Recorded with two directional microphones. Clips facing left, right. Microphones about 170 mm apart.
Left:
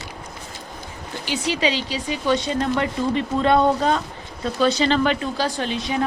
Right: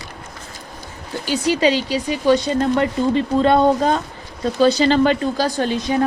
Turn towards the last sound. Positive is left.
turn(degrees=-45)  # may be behind; listen again after turning